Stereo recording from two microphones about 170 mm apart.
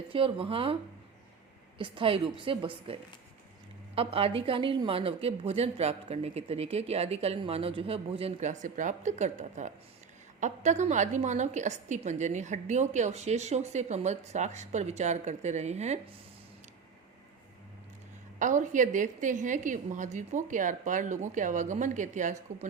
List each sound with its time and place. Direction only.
0.1 s a woman's voice: 30° right (ahead or behind)
1.8 s a woman's voice: 30° right (ahead or behind)
18.3 s a woman's voice: 50° right (ahead or behind)